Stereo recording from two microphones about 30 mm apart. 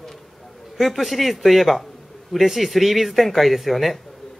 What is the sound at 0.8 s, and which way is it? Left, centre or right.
Speech, centre.